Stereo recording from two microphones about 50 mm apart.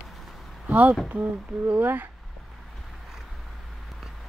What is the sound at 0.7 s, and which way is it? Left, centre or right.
Speech, right.